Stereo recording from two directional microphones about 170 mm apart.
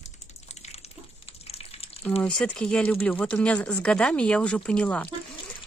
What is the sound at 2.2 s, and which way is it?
Speech, 5° left (ahead or behind).